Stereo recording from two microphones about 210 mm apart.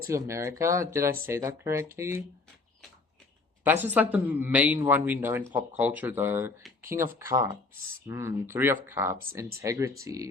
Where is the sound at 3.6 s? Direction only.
10° right (ahead or behind).